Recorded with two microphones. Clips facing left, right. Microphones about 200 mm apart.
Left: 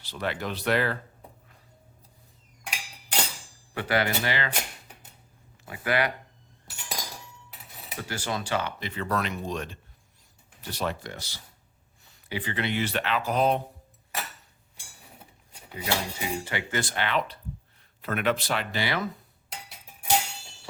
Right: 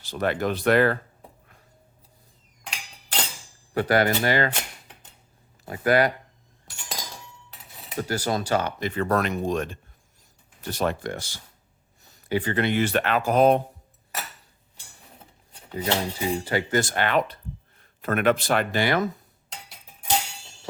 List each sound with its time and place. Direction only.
0.0 s speech: 45° right (ahead or behind)
2.6 s a sound: 10° left (ahead or behind)
3.8 s speech: 45° right (ahead or behind)
5.6 s speech: 45° right (ahead or behind)
6.7 s chink: 5° left (ahead or behind)
7.9 s speech: 40° right (ahead or behind)
15.7 s speech: 35° right (ahead or behind)